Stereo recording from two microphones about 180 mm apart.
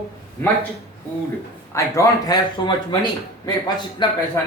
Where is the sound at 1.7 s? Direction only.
15° left (ahead or behind).